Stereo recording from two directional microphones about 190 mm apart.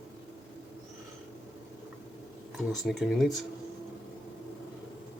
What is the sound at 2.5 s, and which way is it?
Speech, centre (ahead or behind).